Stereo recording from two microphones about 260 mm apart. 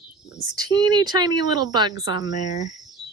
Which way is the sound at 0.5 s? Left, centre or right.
Centre.